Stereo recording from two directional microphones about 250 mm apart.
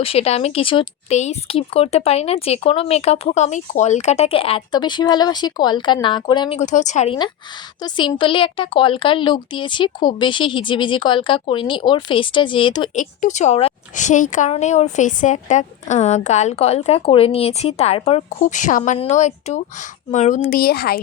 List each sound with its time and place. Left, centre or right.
0.0 s speech: left